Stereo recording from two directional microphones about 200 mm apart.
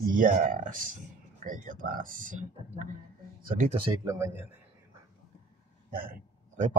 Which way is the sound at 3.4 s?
40° right (ahead or behind).